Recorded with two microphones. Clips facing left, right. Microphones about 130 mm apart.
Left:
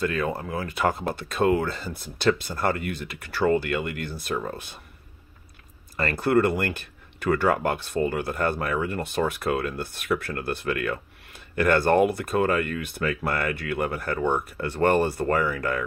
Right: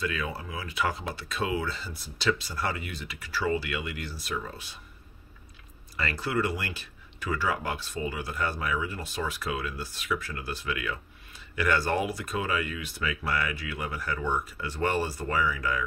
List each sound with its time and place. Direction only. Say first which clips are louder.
0.0 s speech: left 6 dB; 50° left (ahead or behind)
5.9 s speech: left 8 dB; 50° left (ahead or behind)